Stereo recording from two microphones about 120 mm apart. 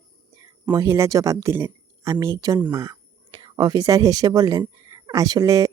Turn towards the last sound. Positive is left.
turn(degrees=-25)  # may be behind; listen again after turning